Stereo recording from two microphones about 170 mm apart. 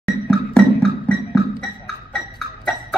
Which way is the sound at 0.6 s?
5° left (ahead or behind).